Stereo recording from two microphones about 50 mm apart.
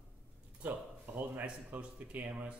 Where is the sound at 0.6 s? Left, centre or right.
Right.